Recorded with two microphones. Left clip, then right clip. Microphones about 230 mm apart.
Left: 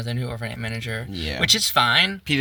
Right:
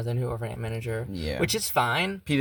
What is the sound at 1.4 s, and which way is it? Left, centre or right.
Speech, right.